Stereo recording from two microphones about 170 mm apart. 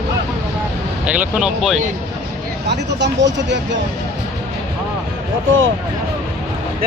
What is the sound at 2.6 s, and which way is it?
Speech, 85° right.